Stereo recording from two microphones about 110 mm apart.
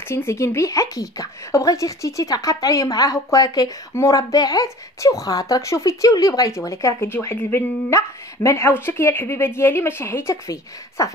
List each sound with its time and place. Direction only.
0.1 s speech: 25° left (ahead or behind)